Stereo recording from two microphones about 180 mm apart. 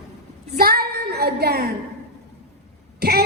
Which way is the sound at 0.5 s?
60° right (ahead or behind).